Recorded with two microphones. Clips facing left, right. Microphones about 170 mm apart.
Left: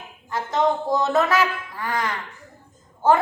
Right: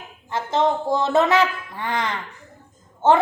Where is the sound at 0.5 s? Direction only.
30° right (ahead or behind).